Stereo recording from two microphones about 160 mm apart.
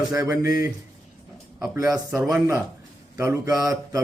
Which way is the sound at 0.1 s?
20° right (ahead or behind).